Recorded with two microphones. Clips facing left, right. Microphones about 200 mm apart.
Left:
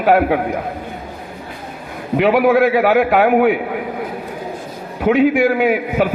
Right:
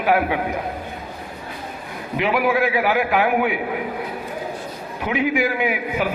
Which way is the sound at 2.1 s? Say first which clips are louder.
Left 7 dB; 60° left (ahead or behind).